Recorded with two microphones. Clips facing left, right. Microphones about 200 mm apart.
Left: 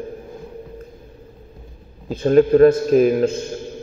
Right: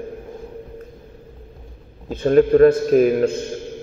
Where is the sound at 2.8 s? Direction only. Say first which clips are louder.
Even; 50° right (ahead or behind).